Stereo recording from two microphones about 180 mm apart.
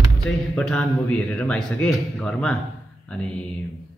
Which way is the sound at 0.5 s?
5° left (ahead or behind).